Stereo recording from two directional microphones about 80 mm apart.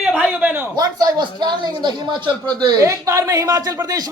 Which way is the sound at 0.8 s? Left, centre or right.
Right.